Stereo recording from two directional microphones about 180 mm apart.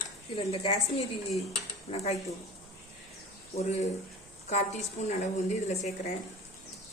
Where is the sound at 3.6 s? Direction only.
40° left (ahead or behind).